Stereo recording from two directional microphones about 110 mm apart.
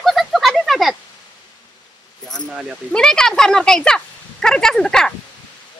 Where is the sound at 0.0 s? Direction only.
Centre (ahead or behind).